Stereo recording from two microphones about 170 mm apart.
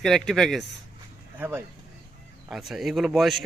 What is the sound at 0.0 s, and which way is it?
Speech, centre (ahead or behind).